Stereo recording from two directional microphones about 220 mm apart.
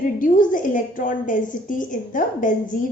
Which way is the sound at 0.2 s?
35° left (ahead or behind).